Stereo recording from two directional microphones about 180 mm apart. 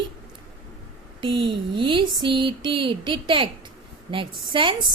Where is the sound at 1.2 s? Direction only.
30° right (ahead or behind).